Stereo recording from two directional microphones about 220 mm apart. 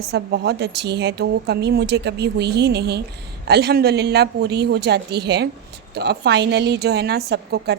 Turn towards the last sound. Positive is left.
turn(degrees=-50)  # may be behind; listen again after turning